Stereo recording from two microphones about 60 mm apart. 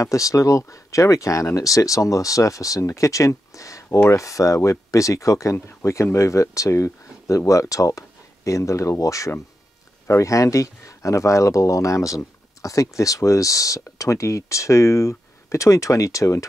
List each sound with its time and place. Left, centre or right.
0.0 s speech: left